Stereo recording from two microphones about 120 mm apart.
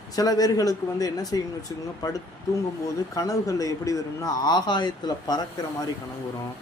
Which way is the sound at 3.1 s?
30° left (ahead or behind).